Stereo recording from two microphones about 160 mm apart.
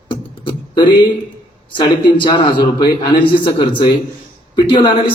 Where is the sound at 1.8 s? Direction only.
30° left (ahead or behind).